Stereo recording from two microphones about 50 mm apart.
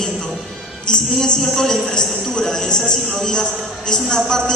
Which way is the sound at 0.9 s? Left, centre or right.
Centre.